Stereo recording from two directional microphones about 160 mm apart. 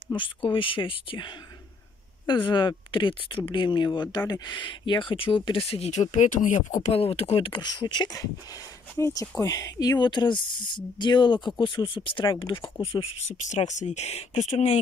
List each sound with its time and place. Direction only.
0.1 s speech: 30° left (ahead or behind); by 6.8 s 50° left (ahead or behind)
6.9 s speech: 35° left (ahead or behind)
13.3 s speech: 50° left (ahead or behind)